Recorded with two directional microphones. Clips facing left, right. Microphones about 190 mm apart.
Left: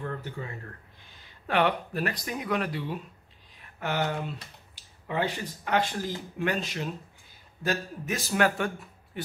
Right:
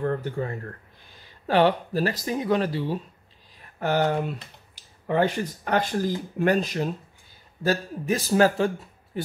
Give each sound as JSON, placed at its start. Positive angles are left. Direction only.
{"t": 0.0, "sound": "speech", "side_deg": -50}
{"t": 1.5, "sound": "speech", "side_deg": -30}